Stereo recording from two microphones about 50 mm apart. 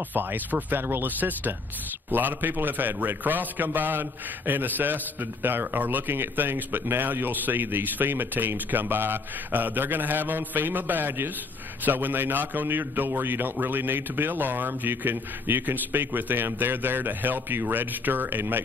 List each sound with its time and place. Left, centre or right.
0.1 s a man's voice: right